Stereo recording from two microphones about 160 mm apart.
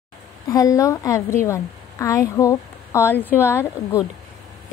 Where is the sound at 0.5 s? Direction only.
20° left (ahead or behind).